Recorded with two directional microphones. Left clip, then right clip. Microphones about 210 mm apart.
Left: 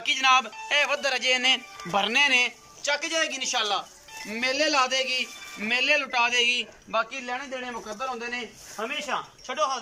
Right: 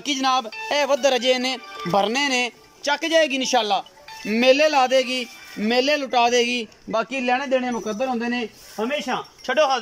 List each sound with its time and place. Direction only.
0.0 s a man's voice: 25° right (ahead or behind)